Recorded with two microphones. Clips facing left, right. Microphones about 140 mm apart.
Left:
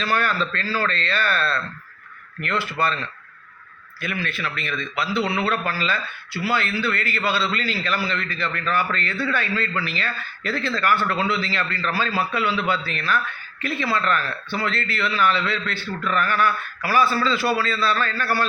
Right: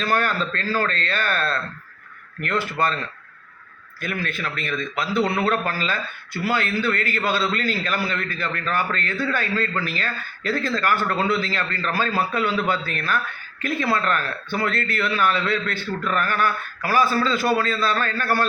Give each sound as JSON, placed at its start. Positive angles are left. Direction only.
{"t": 0.0, "sound": "a man's voice", "side_deg": -45}
{"t": 4.0, "sound": "a man's voice", "side_deg": -45}